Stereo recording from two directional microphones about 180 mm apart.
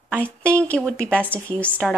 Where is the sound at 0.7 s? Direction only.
Centre (ahead or behind).